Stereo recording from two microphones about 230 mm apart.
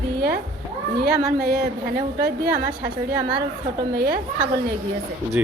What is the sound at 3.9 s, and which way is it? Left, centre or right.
Speech, right.